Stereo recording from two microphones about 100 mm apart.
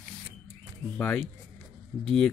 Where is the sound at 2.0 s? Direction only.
5° left (ahead or behind).